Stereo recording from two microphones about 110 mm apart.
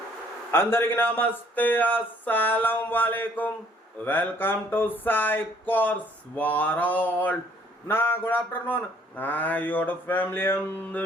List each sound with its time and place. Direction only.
0.5 s speech: 20° left (ahead or behind)